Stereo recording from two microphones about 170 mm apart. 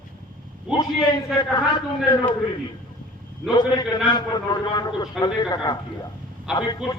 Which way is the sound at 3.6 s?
25° left (ahead or behind).